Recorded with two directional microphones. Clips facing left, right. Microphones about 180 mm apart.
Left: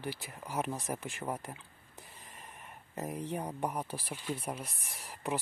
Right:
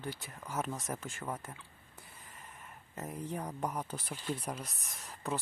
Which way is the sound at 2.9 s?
15° left (ahead or behind).